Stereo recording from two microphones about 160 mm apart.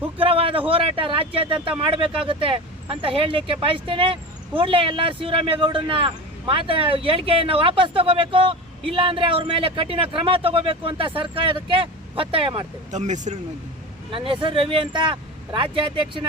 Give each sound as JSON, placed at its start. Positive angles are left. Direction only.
{"t": 0.2, "sound": "speech", "side_deg": -35}
{"t": 12.9, "sound": "speech", "side_deg": -50}
{"t": 14.1, "sound": "speech", "side_deg": -35}